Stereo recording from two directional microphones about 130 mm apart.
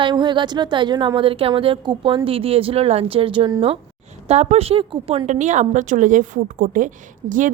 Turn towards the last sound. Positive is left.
turn(degrees=-80)